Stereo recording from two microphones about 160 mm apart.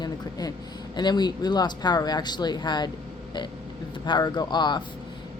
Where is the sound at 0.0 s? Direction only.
25° left (ahead or behind).